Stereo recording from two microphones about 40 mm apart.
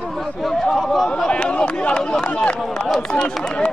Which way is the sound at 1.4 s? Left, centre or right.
Left.